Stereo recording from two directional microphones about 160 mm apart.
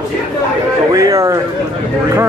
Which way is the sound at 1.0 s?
20° right (ahead or behind).